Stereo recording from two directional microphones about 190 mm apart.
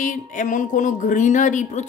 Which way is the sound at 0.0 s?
45° left (ahead or behind).